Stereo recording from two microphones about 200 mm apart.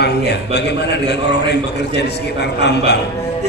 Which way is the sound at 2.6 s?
55° left (ahead or behind).